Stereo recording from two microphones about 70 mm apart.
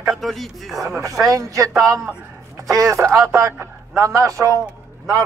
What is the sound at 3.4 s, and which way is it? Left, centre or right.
Speech, right.